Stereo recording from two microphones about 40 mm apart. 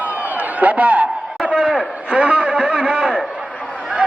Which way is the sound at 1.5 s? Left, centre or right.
Centre.